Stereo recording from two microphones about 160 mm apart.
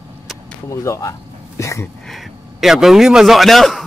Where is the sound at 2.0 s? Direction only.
Centre (ahead or behind).